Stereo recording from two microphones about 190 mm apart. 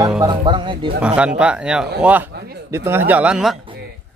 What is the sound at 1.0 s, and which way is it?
Speech, 5° right (ahead or behind).